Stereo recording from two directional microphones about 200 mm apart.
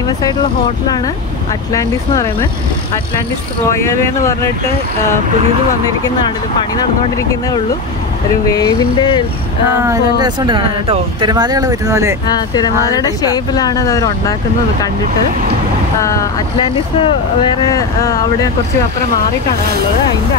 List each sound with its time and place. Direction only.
1.7 s speech: 15° left (ahead or behind)
3.7 s speech: 15° left (ahead or behind)
8.5 s speech: 20° left (ahead or behind)
9.8 s speech: 20° right (ahead or behind)
12.3 s speech: 20° left (ahead or behind)
16.0 s speech: 15° left (ahead or behind)
16.6 s speech: 25° left (ahead or behind)